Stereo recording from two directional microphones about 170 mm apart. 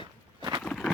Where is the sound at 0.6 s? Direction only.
5° left (ahead or behind).